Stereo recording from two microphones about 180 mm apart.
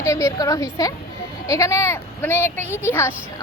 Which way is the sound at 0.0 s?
15° left (ahead or behind).